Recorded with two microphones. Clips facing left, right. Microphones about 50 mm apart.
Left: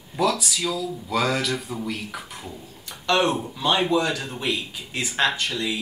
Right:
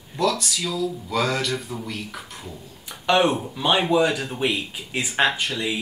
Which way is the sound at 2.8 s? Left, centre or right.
Centre.